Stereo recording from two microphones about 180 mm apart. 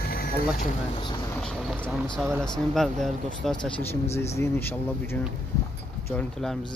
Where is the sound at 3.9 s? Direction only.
15° left (ahead or behind).